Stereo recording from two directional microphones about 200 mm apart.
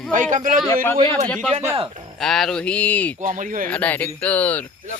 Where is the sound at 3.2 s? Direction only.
40° right (ahead or behind).